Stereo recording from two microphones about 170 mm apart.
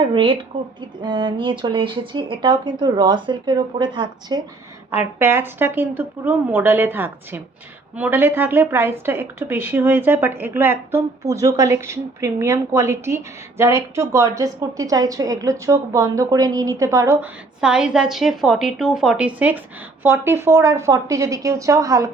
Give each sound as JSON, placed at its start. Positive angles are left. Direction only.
{"t": 0.0, "sound": "a woman's voice", "side_deg": -30}
{"t": 4.9, "sound": "a woman's voice", "side_deg": -15}